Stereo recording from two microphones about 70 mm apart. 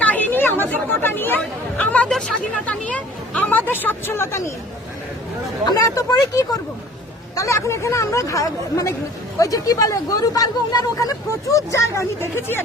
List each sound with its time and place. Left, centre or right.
0.0 s chatter: left
1.8 s hubbub: left
2.0 s chatter: centre
2.6 s hubbub: centre
3.7 s speech: left
5.6 s speech: left
7.3 s speech: left
11.3 s speech: left